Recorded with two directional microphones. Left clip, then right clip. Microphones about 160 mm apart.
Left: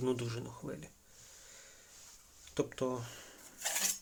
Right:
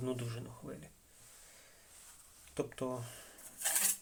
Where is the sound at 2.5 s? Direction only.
35° left (ahead or behind).